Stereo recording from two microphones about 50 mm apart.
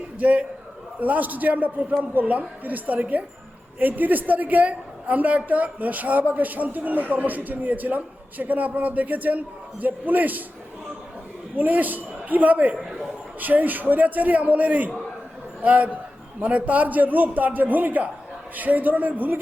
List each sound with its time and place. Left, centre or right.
0.2 s a man's voice: right
11.5 s a woman's voice: right